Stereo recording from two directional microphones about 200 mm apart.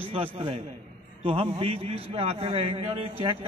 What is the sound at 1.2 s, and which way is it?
A man's voice, 30° right (ahead or behind).